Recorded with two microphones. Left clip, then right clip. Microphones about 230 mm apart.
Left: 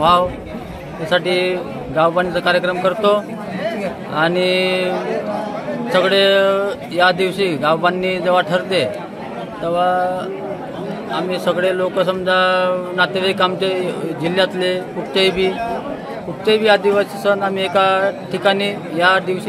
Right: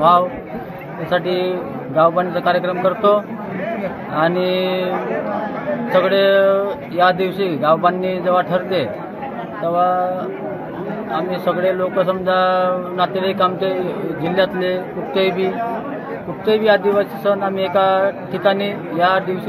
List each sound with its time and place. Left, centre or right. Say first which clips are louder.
1.1 s speech: left 2 dB; left
4.1 s speech: left 1 dB; left
5.9 s speech: even; left
11.2 s speech: left 2 dB; centre
11.5 s speech: even; left
16.4 s speech: left 1 dB; left